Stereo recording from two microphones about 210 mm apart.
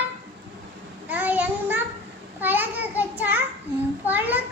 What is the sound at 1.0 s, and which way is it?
Child singing, 10° right (ahead or behind).